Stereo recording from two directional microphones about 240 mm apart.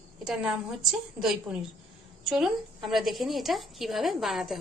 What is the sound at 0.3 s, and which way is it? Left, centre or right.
A woman's voice, centre.